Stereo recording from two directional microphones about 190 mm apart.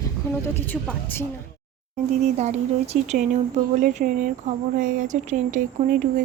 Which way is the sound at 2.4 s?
35° right (ahead or behind).